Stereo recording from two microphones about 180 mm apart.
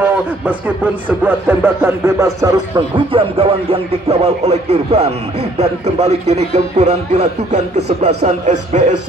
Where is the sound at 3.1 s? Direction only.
30° right (ahead or behind).